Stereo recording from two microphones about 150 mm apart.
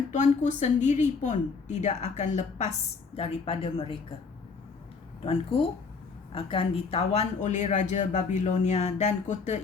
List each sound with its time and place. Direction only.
0.1 s speech: 50° left (ahead or behind)
3.2 s a woman's voice: 40° left (ahead or behind)
6.3 s speech: 40° left (ahead or behind)